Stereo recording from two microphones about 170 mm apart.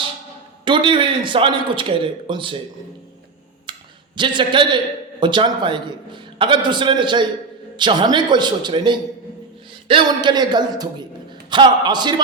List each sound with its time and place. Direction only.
0.6 s a man's voice: 30° right (ahead or behind)
3.7 s a sound: 30° right (ahead or behind)
4.2 s a man's voice: 25° right (ahead or behind)